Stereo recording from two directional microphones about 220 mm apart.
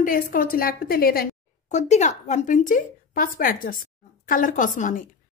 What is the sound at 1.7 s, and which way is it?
Speech, 30° left (ahead or behind).